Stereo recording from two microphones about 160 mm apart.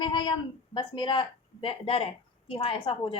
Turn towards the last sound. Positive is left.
turn(degrees=35)  # may be behind; listen again after turning